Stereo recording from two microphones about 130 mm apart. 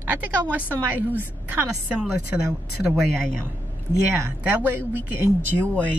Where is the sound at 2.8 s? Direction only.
Centre (ahead or behind).